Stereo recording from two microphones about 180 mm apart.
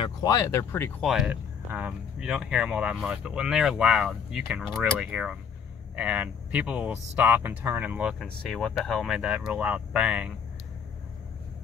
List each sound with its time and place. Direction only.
0.2 s speech: 20° left (ahead or behind)
1.0 s speech: 5° right (ahead or behind)